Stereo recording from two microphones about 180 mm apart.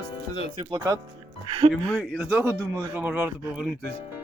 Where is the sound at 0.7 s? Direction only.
20° right (ahead or behind).